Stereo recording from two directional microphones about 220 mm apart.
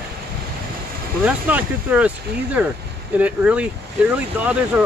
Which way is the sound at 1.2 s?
5° right (ahead or behind).